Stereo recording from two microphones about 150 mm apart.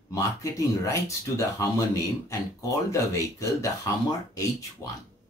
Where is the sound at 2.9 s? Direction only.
20° left (ahead or behind).